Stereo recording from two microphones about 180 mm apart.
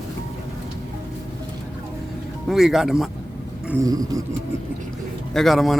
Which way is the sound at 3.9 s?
20° right (ahead or behind).